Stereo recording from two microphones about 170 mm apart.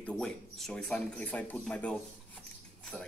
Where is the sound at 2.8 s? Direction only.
5° left (ahead or behind).